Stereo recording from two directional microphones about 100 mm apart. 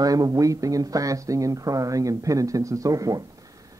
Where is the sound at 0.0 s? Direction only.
35° right (ahead or behind).